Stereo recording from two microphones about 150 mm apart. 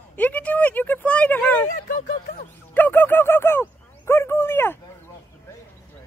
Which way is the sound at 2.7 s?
10° left (ahead or behind).